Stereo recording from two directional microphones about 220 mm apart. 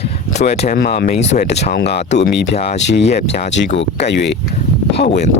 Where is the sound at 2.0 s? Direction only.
30° left (ahead or behind).